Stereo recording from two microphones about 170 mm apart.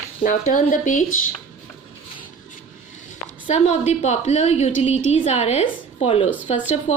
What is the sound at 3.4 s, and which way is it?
A woman's voice, 40° left (ahead or behind).